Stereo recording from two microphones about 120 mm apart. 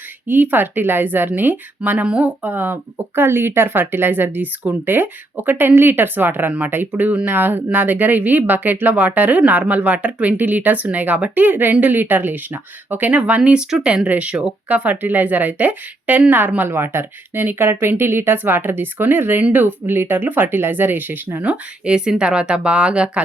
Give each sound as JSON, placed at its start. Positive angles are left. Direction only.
{"t": 0.3, "sound": "a woman's voice", "side_deg": -15}